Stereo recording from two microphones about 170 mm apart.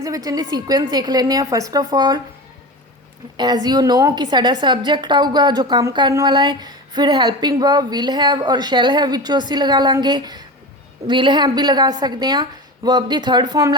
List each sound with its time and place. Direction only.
0.0 s a woman's voice: 20° right (ahead or behind)
3.3 s a woman's voice: 25° right (ahead or behind)